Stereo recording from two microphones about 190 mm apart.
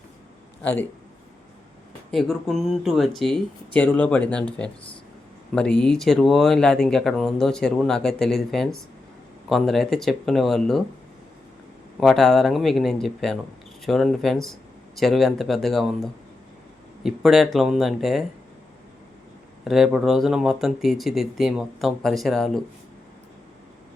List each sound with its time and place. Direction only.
0.6 s a man's voice: 10° left (ahead or behind)
2.0 s speech: centre (ahead or behind)
5.5 s speech: 5° left (ahead or behind)
11.9 s speech: centre (ahead or behind)
19.6 s speech: centre (ahead or behind)